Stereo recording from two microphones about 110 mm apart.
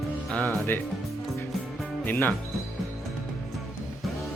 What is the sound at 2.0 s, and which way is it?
Speech, 15° left (ahead or behind).